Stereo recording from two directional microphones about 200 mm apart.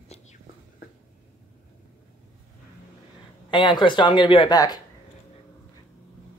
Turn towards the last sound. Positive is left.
turn(degrees=20)  # may be behind; listen again after turning